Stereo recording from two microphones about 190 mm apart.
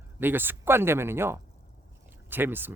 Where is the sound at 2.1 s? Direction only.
10° right (ahead or behind).